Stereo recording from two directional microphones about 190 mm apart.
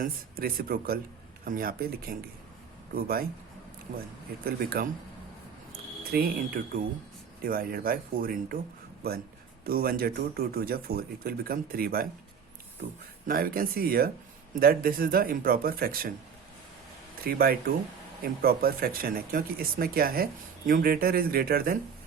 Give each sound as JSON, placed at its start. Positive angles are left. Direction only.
{"t": 0.0, "sound": "speech", "side_deg": -50}
{"t": 3.9, "sound": "speech", "side_deg": -40}
{"t": 4.4, "sound": "speech", "side_deg": -50}
{"t": 6.1, "sound": "speech", "side_deg": -50}
{"t": 9.6, "sound": "speech", "side_deg": -50}
{"t": 13.2, "sound": "speech", "side_deg": -50}
{"t": 17.2, "sound": "speech", "side_deg": -50}